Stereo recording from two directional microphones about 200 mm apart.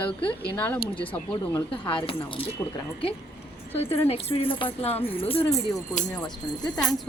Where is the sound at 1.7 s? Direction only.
25° left (ahead or behind).